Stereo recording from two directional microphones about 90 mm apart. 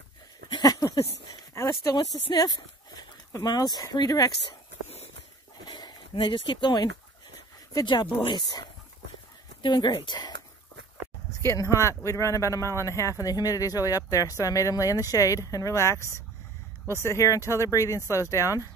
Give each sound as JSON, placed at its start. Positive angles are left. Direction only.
{"t": 0.6, "sound": "a sound", "side_deg": 40}
{"t": 2.3, "sound": "speech", "side_deg": 55}
{"t": 5.7, "sound": "speech", "side_deg": 60}
{"t": 11.4, "sound": "a man's voice", "side_deg": 30}